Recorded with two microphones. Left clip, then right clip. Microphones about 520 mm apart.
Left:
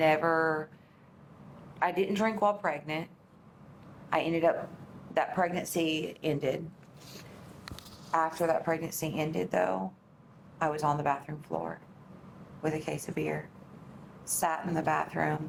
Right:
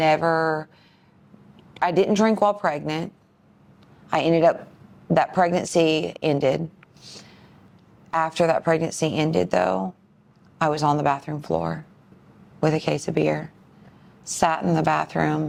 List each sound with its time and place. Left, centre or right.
0.0 s a woman's voice: right
1.8 s a woman's voice: right
4.1 s a woman's voice: right
8.1 s a woman's voice: right